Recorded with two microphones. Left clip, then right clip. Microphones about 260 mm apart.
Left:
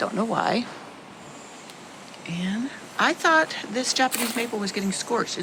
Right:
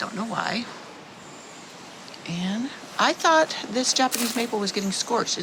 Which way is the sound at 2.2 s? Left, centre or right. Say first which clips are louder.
Even; centre.